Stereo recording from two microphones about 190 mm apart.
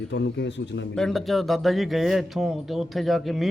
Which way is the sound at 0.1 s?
70° left (ahead or behind).